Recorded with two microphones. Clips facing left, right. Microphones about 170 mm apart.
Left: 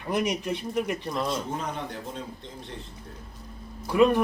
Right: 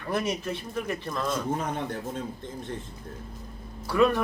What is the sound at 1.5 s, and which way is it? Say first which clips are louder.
Speech: right 2 dB; 50° right (ahead or behind).